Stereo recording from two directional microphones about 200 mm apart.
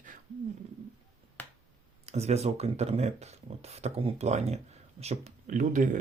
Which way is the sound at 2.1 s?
30° right (ahead or behind).